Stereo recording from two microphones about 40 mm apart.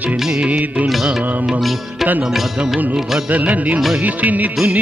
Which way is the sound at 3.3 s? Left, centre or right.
Right.